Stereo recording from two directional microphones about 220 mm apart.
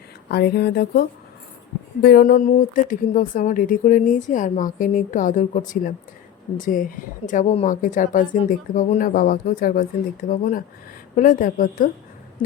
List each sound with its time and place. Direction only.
0.3 s speech: 45° left (ahead or behind)